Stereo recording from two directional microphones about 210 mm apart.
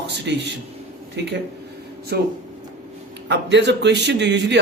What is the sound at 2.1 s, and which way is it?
A man's voice, 50° right (ahead or behind).